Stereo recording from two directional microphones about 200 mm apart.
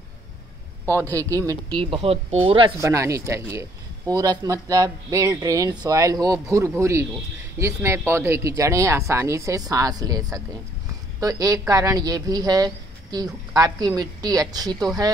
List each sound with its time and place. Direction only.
1.1 s speech: 15° right (ahead or behind)
2.8 s speech: 15° right (ahead or behind)